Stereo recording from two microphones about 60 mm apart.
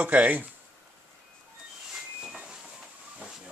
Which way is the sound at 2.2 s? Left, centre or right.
Centre.